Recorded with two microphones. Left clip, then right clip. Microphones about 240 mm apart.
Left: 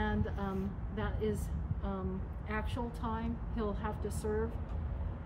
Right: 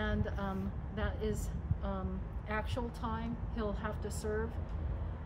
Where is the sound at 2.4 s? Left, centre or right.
Centre.